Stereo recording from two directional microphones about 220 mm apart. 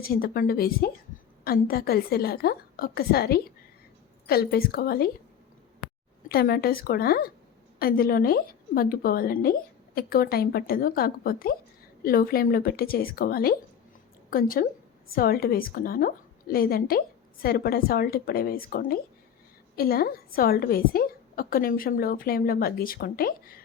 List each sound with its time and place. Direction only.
0.0 s speech: 40° left (ahead or behind)
6.2 s a woman's voice: 45° left (ahead or behind)